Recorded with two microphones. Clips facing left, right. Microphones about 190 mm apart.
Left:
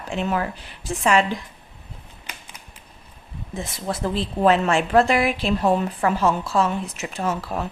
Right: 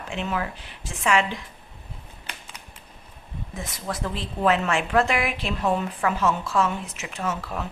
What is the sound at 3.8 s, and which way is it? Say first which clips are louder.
A woman's voice: left 6 dB; 30° left (ahead or behind).